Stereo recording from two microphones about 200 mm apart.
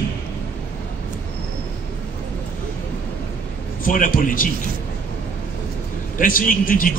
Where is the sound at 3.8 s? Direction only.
40° left (ahead or behind).